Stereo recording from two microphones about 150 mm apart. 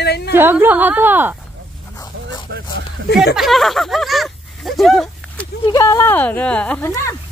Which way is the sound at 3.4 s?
Centre (ahead or behind).